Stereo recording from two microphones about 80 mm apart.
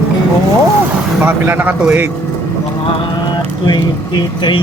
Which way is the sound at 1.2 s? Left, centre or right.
Right.